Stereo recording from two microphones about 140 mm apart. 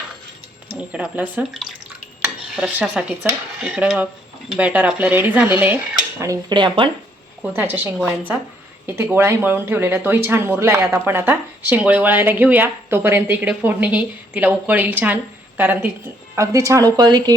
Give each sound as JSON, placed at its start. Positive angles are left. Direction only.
{"t": 0.7, "sound": "speech", "side_deg": -10}
{"t": 2.6, "sound": "speech", "side_deg": -5}
{"t": 7.5, "sound": "speech", "side_deg": -15}
{"t": 8.9, "sound": "speech", "side_deg": -15}